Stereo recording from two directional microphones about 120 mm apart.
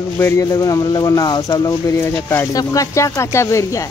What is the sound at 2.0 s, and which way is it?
Speech, 15° left (ahead or behind).